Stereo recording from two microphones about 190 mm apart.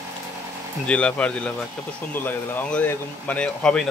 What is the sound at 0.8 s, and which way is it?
Speech, 5° left (ahead or behind).